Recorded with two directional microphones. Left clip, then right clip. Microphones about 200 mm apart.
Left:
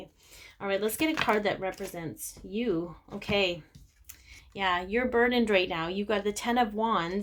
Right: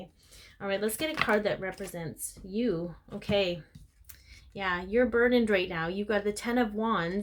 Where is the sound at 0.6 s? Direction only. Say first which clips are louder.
Left 2 dB; 30° left (ahead or behind).